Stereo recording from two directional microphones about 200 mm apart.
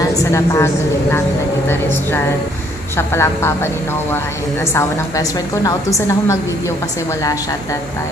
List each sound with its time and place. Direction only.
0.1 s a woman's voice: 15° left (ahead or behind)
3.0 s a woman's voice: 10° left (ahead or behind)
4.7 s a woman's voice: 15° left (ahead or behind)